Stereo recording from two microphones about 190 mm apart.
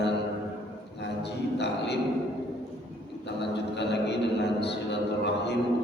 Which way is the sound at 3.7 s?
65° left (ahead or behind).